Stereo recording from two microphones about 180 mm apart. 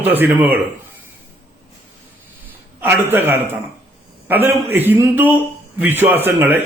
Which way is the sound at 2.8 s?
10° right (ahead or behind).